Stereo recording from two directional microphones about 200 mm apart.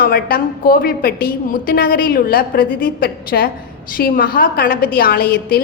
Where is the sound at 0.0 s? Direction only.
45° left (ahead or behind).